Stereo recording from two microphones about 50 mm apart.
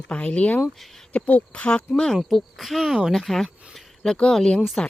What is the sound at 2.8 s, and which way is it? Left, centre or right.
Speech, centre.